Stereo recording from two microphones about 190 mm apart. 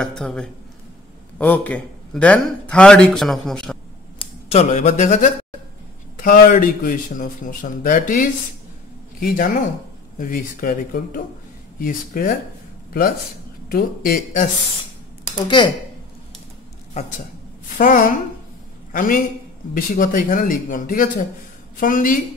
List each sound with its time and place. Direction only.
0.0 s a man's voice: 5° left (ahead or behind)
4.2 s a man's voice: 35° left (ahead or behind); by 12.4 s 50° left (ahead or behind)
13.7 s a man's voice: 50° left (ahead or behind)
15.4 s speech: 25° left (ahead or behind)
17.7 s a man's voice: 45° left (ahead or behind)